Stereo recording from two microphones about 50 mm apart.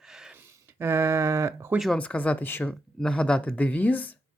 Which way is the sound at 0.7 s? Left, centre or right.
Right.